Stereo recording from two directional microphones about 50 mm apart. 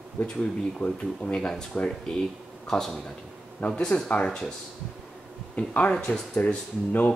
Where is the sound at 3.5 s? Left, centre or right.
Left.